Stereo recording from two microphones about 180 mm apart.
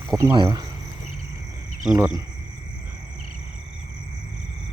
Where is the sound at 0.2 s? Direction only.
25° right (ahead or behind).